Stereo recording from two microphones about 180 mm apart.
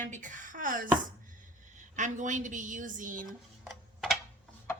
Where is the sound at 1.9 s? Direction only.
45° right (ahead or behind).